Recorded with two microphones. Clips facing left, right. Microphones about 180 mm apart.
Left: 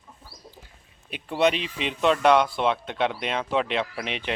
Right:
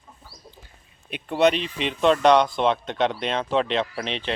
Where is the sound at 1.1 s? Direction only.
5° left (ahead or behind).